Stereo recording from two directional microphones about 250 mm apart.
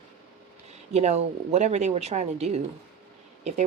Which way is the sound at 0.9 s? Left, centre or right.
Right.